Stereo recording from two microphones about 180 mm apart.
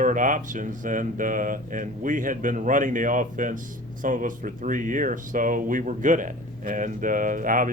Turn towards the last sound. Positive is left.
turn(degrees=-50)  # may be behind; listen again after turning